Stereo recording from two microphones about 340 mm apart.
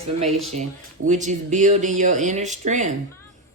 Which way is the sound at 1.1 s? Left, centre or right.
Right.